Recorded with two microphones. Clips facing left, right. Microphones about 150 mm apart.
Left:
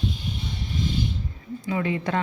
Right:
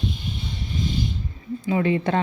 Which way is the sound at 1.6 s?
30° right (ahead or behind).